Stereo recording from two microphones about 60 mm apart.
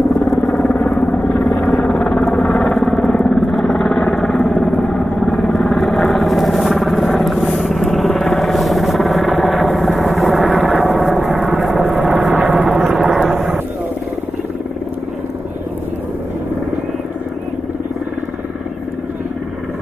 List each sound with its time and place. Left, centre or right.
0.1 s vehicle: centre
0.7 s vehicle: left
1.3 s vehicle: centre
13.3 s a sound: centre